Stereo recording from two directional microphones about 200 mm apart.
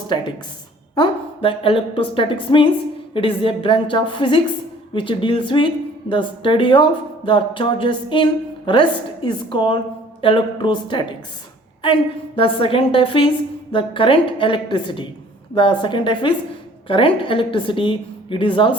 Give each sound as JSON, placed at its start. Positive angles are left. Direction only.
{"t": 0.9, "sound": "a woman's voice", "side_deg": 25}
{"t": 12.4, "sound": "a woman's voice", "side_deg": 25}